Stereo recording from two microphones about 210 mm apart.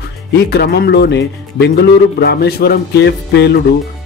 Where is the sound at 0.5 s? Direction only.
50° left (ahead or behind).